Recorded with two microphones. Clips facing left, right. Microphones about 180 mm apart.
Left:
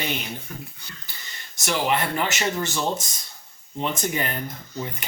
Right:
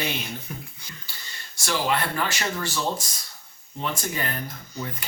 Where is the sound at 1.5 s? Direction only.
20° left (ahead or behind).